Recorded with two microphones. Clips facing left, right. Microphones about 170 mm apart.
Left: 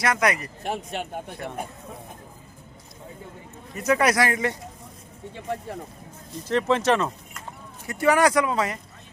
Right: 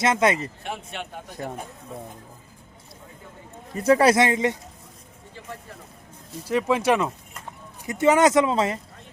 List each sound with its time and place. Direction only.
0.0 s speech: 25° right (ahead or behind)
0.6 s a man's voice: 40° left (ahead or behind)
1.3 s speech: 40° right (ahead or behind)
3.8 s speech: 30° right (ahead or behind)
6.4 s speech: 10° right (ahead or behind)
7.9 s speech: 20° right (ahead or behind)